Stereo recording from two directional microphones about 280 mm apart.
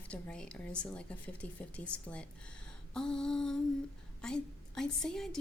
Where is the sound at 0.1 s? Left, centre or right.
Centre.